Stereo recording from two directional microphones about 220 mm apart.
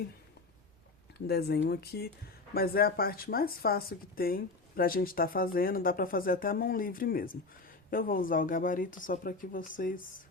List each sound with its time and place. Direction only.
1.3 s speech: 45° left (ahead or behind)